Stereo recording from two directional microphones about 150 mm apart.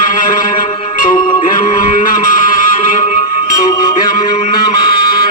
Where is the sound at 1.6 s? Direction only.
65° left (ahead or behind).